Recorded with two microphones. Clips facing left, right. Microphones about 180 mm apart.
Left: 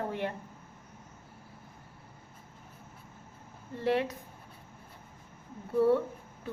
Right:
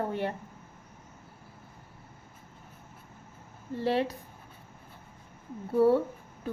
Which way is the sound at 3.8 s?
30° right (ahead or behind).